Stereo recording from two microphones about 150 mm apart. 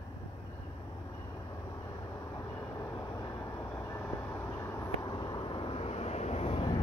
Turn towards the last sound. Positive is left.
turn(degrees=35)  # may be behind; listen again after turning